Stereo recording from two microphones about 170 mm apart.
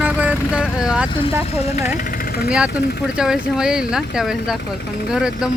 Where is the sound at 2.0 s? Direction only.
55° left (ahead or behind).